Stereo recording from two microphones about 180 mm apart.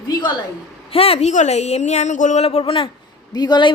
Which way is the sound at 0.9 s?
30° left (ahead or behind).